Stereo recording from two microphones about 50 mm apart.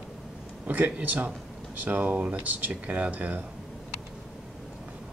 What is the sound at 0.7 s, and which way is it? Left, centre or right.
Speech, right.